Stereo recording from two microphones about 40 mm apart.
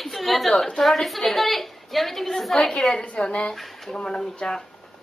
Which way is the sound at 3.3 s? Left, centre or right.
Left.